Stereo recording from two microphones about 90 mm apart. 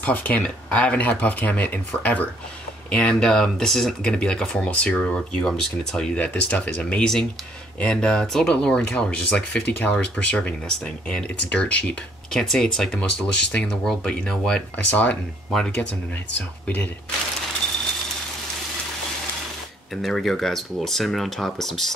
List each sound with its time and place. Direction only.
0.0 s speech: 20° left (ahead or behind)
20.0 s speech: 5° left (ahead or behind)